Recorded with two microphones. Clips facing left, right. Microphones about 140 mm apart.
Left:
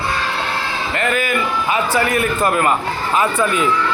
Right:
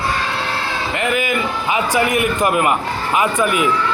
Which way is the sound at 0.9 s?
15° right (ahead or behind).